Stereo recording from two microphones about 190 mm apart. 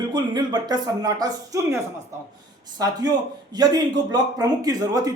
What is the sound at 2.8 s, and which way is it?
Speech, 20° right (ahead or behind).